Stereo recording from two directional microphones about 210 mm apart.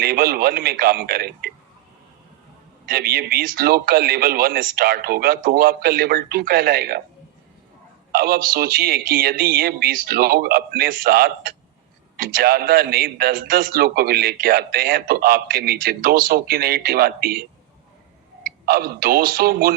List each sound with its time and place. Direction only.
0.0 s a man's voice: 45° right (ahead or behind)
2.9 s a man's voice: 45° right (ahead or behind)
8.1 s a man's voice: 45° right (ahead or behind)
18.6 s a man's voice: 45° right (ahead or behind)